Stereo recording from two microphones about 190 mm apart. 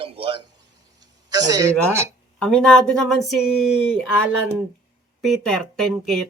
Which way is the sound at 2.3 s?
5° left (ahead or behind).